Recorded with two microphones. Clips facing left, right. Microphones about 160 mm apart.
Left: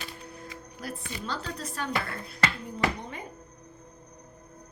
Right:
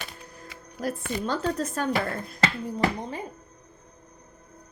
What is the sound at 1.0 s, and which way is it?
Speech, 50° right (ahead or behind).